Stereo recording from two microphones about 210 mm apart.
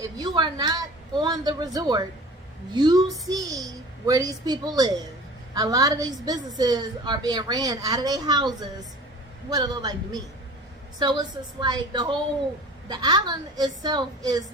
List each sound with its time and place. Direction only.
0.2 s a woman's voice: 20° right (ahead or behind)